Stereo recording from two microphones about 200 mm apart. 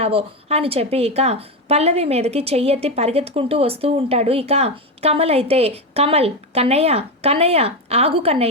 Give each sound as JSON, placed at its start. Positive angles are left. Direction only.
{"t": 0.0, "sound": "a woman's voice", "side_deg": -30}